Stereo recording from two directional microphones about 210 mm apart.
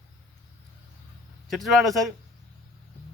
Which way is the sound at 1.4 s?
Centre (ahead or behind).